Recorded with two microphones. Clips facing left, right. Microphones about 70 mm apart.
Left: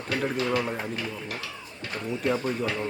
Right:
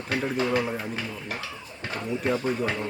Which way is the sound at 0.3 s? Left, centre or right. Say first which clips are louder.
Right 3 dB; right.